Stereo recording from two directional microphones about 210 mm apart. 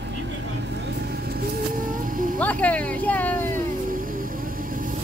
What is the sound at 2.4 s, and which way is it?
Speech, 5° left (ahead or behind).